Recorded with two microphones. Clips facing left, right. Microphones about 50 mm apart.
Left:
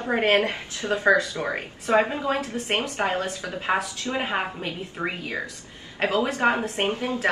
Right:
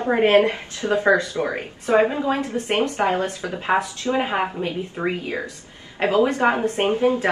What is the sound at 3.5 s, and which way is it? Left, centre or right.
Speech, centre.